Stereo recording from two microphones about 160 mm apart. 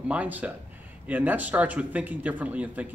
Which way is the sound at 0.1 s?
10° right (ahead or behind).